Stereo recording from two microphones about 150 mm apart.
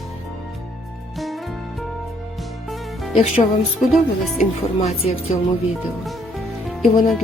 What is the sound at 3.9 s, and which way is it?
Speech, centre (ahead or behind).